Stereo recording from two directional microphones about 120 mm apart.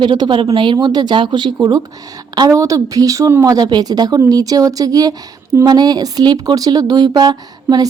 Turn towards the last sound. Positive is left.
turn(degrees=-35)  # may be behind; listen again after turning